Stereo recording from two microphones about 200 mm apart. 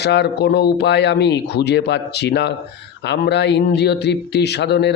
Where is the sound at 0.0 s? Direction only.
55° left (ahead or behind).